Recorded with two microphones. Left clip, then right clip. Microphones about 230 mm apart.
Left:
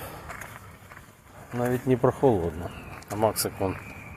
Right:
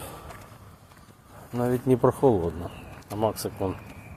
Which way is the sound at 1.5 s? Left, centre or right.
Centre.